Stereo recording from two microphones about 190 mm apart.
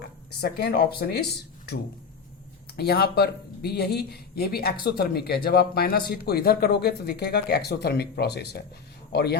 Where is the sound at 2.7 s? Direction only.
55° left (ahead or behind).